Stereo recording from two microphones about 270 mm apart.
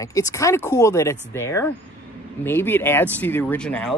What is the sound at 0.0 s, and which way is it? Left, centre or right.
Speech, centre.